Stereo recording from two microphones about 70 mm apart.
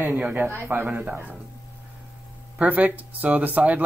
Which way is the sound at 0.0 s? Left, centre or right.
Right.